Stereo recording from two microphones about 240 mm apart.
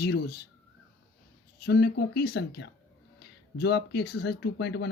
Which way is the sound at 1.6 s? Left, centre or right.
Left.